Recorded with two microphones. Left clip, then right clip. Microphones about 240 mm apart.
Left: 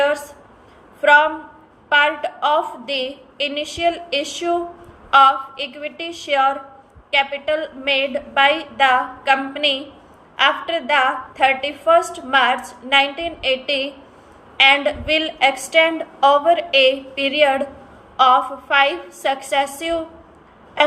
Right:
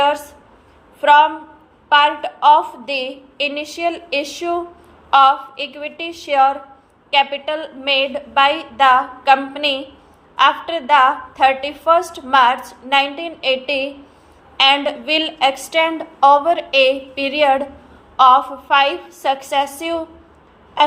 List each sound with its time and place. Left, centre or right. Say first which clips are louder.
1.0 s a woman's voice: right 2 dB; centre
5.1 s a woman's voice: right 1 dB; centre